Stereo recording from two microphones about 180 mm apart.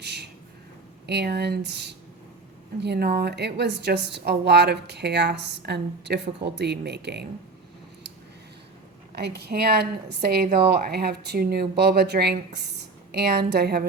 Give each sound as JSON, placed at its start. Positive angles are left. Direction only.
{"t": 0.0, "sound": "a sound", "side_deg": -65}
{"t": 1.0, "sound": "a woman's voice", "side_deg": -65}
{"t": 9.1, "sound": "a woman's voice", "side_deg": -65}